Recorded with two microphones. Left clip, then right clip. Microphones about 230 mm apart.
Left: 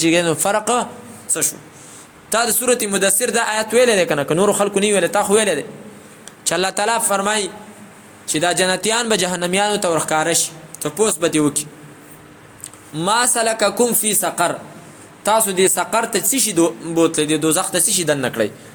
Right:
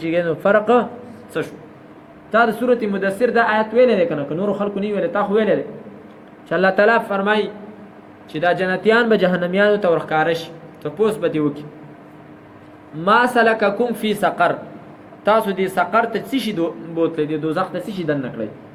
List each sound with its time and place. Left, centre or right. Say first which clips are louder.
0.0 s a man's voice: left 2 dB; left
13.0 s a man's voice: right 3 dB; left